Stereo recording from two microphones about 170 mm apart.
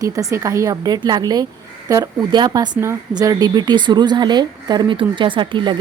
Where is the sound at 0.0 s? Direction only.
20° right (ahead or behind).